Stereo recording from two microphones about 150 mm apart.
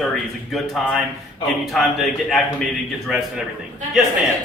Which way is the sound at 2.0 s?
Centre (ahead or behind).